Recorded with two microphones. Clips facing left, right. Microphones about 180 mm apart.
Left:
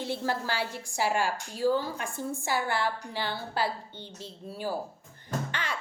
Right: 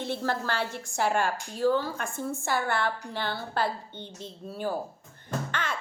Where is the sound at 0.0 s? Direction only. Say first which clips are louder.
Right 1 dB; 10° left (ahead or behind).